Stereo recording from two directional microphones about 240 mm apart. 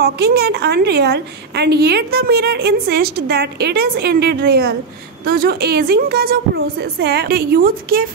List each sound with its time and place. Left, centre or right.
0.0 s a woman's voice: right